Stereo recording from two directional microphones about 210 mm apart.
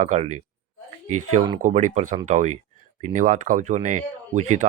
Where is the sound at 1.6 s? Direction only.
35° right (ahead or behind).